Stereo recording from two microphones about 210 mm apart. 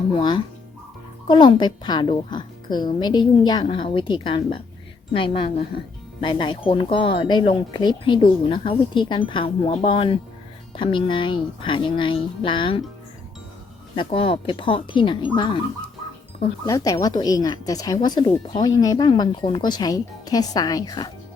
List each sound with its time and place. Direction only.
0.1 s speech: 25° left (ahead or behind)
13.9 s speech: 25° left (ahead or behind)
16.6 s speech: 15° left (ahead or behind)